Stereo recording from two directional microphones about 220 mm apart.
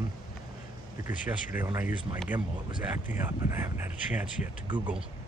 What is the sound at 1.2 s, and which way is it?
Speech, 10° right (ahead or behind).